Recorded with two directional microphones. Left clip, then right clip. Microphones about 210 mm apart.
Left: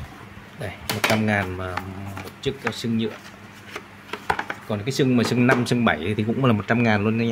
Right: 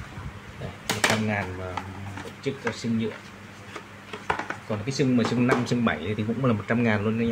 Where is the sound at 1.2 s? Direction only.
45° left (ahead or behind).